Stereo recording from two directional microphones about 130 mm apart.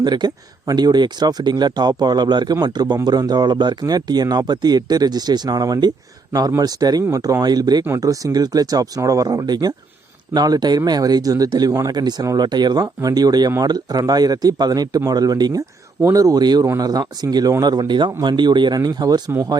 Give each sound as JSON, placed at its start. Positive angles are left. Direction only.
{"t": 0.0, "sound": "speech", "side_deg": -35}